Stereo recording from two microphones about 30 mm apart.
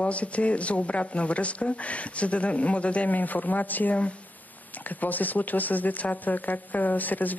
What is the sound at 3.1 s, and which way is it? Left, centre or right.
Speech, left.